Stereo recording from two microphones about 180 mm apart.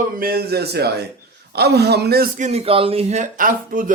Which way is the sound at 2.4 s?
35° right (ahead or behind).